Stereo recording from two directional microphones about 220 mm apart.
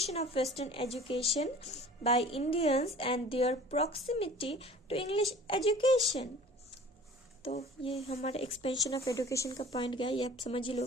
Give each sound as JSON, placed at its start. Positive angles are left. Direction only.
{"t": 0.0, "sound": "a woman's voice", "side_deg": 30}
{"t": 7.4, "sound": "a woman's voice", "side_deg": 25}
{"t": 8.6, "sound": "a woman's voice", "side_deg": 15}